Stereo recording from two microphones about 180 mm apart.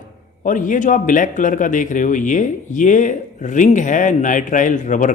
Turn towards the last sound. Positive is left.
turn(degrees=45)  # may be behind; listen again after turning